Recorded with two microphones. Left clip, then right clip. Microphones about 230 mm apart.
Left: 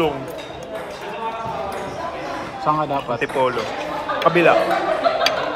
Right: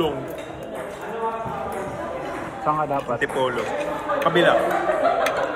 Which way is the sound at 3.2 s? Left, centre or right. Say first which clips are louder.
Left 3 dB; left.